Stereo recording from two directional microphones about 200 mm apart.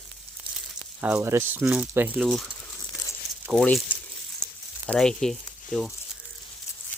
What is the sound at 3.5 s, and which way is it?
Speech, centre (ahead or behind).